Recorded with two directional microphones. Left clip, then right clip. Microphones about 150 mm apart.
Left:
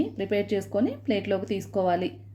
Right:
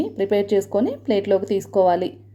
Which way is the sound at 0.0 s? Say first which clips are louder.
Right 6 dB; 25° right (ahead or behind).